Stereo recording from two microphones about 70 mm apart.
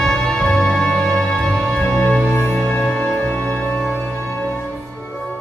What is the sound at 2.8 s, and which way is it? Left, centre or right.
Music, centre.